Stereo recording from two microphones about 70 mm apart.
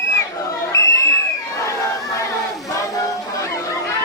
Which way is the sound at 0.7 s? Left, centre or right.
Left.